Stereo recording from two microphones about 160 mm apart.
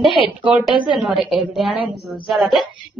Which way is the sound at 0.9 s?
Centre (ahead or behind).